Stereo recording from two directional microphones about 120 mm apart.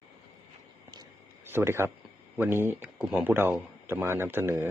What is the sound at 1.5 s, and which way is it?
Speech, 20° right (ahead or behind).